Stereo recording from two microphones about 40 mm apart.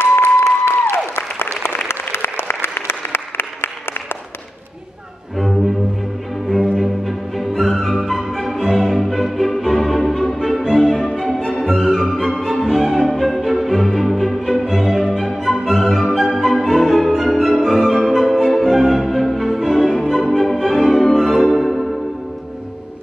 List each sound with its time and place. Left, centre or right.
0.0 s applause: left
1.6 s applause: left
6.8 s music: centre